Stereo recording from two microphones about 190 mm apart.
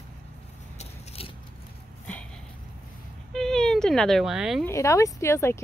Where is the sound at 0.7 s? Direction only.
30° left (ahead or behind).